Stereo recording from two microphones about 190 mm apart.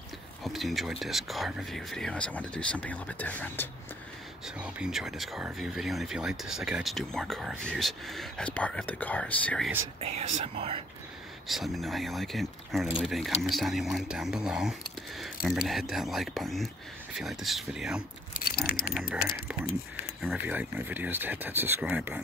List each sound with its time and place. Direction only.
0.4 s speech: centre (ahead or behind)
4.6 s speech: 5° right (ahead or behind)
9.9 s speech: 35° right (ahead or behind)
11.4 s speech: centre (ahead or behind)
18.4 s keys jangling: 55° left (ahead or behind)
20.2 s speech: 10° right (ahead or behind)